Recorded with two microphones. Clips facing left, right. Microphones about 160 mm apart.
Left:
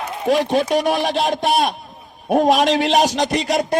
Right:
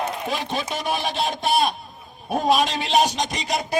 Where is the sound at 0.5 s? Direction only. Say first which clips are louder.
Left 9 dB; 70° left (ahead or behind).